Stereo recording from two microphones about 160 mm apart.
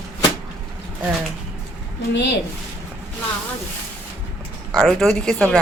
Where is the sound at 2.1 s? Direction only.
90° left.